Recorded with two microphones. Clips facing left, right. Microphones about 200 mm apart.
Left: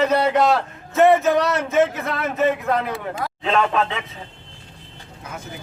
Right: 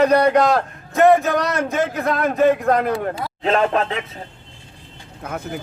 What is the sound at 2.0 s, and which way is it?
A man's voice, 45° right (ahead or behind).